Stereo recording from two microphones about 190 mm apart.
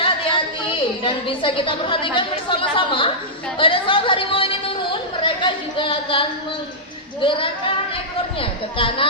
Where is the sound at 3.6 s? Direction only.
25° left (ahead or behind).